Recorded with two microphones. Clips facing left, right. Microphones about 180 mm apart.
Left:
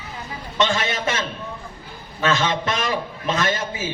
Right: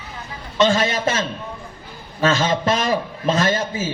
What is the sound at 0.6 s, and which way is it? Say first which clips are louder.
Speech: right 5 dB; 35° right (ahead or behind).